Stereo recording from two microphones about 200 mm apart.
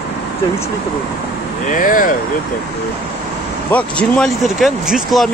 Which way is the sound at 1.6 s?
40° left (ahead or behind).